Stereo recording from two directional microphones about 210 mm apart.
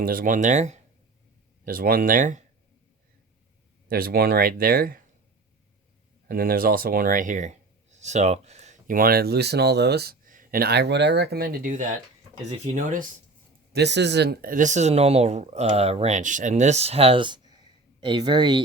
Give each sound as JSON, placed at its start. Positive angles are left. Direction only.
{"t": 0.0, "sound": "speech", "side_deg": -45}
{"t": 3.8, "sound": "speech", "side_deg": -45}
{"t": 6.2, "sound": "speech", "side_deg": -45}
{"t": 13.7, "sound": "speech", "side_deg": -55}